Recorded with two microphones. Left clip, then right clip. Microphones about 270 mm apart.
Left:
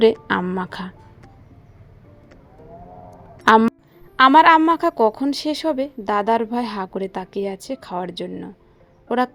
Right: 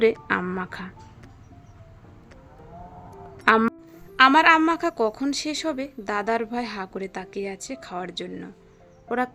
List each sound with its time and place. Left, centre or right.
0.3 s a woman's voice: centre
3.4 s a woman's voice: centre